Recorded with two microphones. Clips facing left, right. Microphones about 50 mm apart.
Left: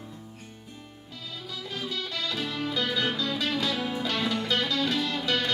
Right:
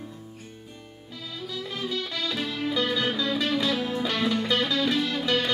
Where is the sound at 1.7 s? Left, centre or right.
Right.